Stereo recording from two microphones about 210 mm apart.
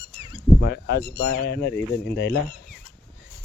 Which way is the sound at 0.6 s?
50° left (ahead or behind).